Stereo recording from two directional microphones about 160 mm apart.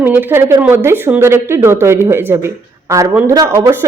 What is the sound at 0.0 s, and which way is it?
Speech, 10° right (ahead or behind).